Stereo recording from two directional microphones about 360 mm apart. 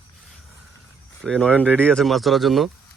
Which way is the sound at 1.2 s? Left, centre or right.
Centre.